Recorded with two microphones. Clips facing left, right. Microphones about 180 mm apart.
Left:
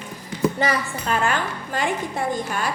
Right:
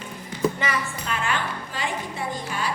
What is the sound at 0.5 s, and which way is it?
A woman's voice, 35° left (ahead or behind).